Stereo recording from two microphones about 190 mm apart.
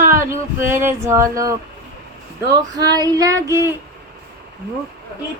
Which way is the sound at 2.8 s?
20° right (ahead or behind).